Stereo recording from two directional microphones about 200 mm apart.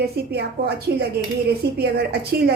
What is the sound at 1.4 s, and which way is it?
Speech, 55° right (ahead or behind).